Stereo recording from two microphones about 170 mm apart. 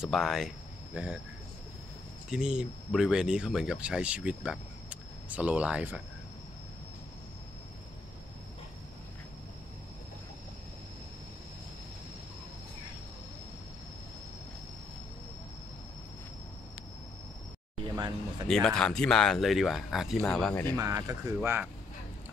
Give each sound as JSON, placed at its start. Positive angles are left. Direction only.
{"t": 0.0, "sound": "speech", "side_deg": 0}
{"t": 2.2, "sound": "speech", "side_deg": -5}
{"t": 17.8, "sound": "a sound", "side_deg": -25}
{"t": 18.5, "sound": "speech", "side_deg": 5}
{"t": 20.7, "sound": "speech", "side_deg": -20}